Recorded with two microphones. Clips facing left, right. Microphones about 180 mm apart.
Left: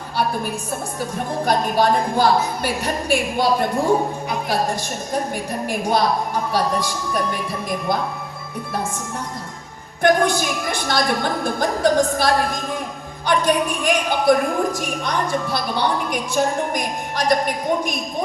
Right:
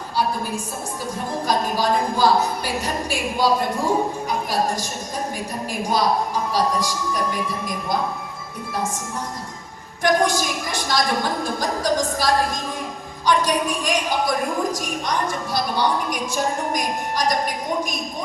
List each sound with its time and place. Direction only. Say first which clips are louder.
0.2 s a woman's voice: even; 60° left (ahead or behind)
1.5 s a woman's voice: left 3 dB; 60° left (ahead or behind)
5.9 s a woman's voice: even; 60° left (ahead or behind)
10.0 s a woman's voice: left 2 dB; 60° left (ahead or behind)